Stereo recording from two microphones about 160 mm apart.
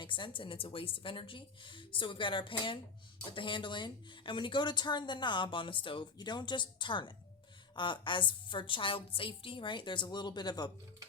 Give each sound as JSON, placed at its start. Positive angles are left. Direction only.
{"t": 0.0, "sound": "a woman's voice", "side_deg": 30}